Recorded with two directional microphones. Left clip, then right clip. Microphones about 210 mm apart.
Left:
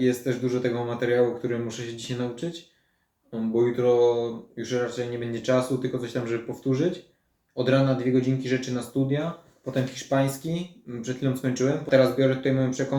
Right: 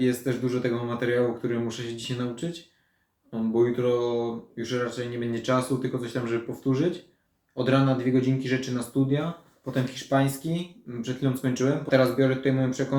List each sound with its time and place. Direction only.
0.0 s speech: centre (ahead or behind)